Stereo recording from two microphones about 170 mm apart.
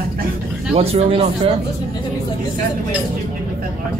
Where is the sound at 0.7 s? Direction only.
35° right (ahead or behind).